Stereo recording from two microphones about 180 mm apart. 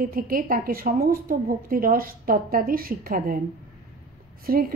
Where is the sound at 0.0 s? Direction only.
55° right (ahead or behind).